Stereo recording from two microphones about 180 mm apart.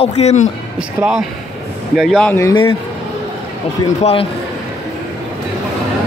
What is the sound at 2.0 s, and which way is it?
Speech, centre (ahead or behind).